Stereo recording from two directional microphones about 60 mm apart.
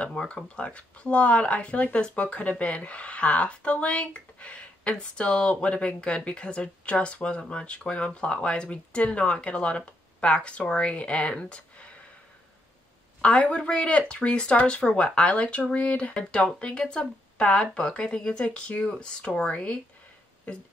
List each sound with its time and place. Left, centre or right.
0.0 s a sound: centre
0.6 s speech: centre
13.2 s speech: left